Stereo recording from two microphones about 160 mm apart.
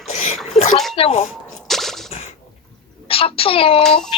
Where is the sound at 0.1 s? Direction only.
45° left (ahead or behind).